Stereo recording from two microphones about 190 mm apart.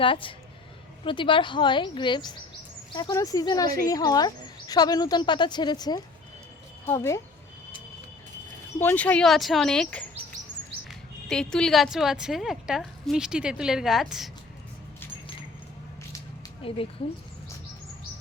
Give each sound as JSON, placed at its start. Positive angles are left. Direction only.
{"t": 0.0, "sound": "speech", "side_deg": 25}
{"t": 8.8, "sound": "a woman's voice", "side_deg": 10}
{"t": 11.3, "sound": "a woman's voice", "side_deg": 5}
{"t": 16.6, "sound": "speech", "side_deg": 30}